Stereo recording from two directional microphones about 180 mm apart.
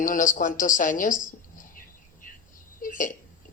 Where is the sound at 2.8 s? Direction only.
50° left (ahead or behind).